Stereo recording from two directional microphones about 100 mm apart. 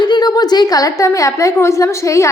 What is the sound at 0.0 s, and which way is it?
A woman's voice, 45° left (ahead or behind).